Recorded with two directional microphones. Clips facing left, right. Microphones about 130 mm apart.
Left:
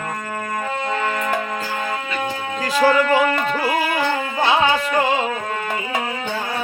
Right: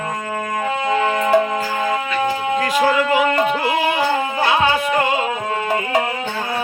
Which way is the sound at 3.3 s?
20° right (ahead or behind).